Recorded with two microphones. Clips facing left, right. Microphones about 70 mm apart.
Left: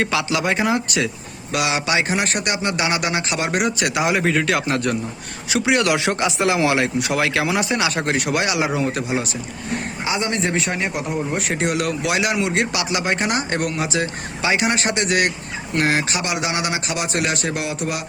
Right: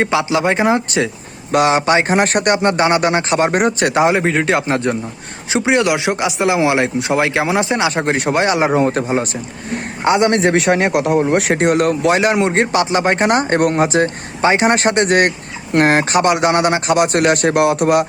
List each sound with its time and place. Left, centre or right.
0.0 s a man's voice: right
10.0 s a man's voice: right
11.5 s a man's voice: right